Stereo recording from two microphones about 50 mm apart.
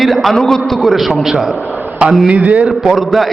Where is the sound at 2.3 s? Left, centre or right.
Right.